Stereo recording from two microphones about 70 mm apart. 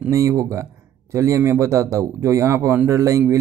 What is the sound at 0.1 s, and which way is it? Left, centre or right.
Speech, right.